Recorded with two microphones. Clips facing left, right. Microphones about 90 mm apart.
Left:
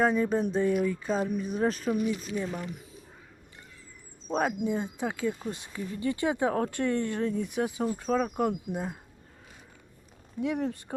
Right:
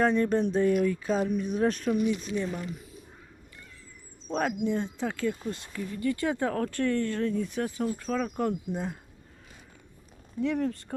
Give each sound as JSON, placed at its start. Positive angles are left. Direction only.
{"t": 0.0, "sound": "speech", "side_deg": 5}
{"t": 4.3, "sound": "speech", "side_deg": 10}
{"t": 10.4, "sound": "speech", "side_deg": 20}